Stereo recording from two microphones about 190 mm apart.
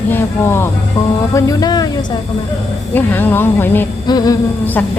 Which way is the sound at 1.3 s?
15° left (ahead or behind).